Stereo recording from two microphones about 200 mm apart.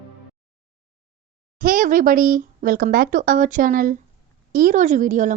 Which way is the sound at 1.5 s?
45° right (ahead or behind).